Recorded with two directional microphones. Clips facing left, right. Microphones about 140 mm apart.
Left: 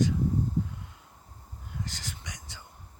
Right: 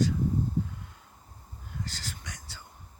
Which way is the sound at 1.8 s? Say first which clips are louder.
Even; 20° left (ahead or behind).